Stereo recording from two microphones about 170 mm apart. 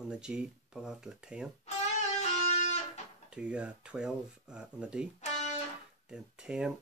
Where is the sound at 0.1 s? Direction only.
5° right (ahead or behind).